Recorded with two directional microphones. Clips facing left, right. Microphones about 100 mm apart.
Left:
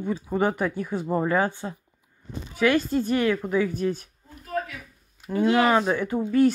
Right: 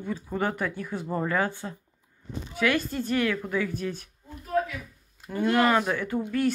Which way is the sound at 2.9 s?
10° left (ahead or behind).